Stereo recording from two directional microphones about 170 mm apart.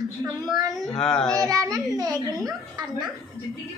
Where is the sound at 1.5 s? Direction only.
20° right (ahead or behind).